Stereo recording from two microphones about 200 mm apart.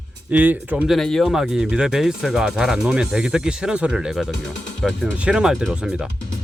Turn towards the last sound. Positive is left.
turn(degrees=0)  # may be behind; listen again after turning